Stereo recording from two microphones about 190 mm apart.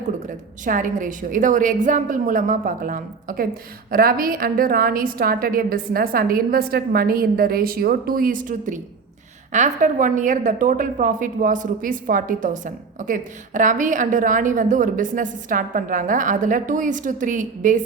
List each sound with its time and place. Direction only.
0.6 s a woman's voice: 45° right (ahead or behind)